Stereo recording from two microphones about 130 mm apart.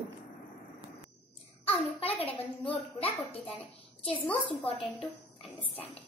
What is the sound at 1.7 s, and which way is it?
A woman's voice, 50° left (ahead or behind).